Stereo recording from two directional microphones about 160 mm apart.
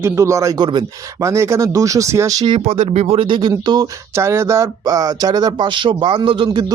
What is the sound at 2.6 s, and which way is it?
Speech, 35° right (ahead or behind).